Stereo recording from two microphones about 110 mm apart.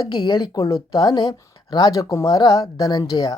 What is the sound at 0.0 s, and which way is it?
A woman's voice, 40° left (ahead or behind).